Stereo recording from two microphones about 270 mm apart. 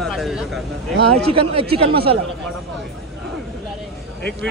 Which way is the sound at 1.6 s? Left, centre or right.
Right.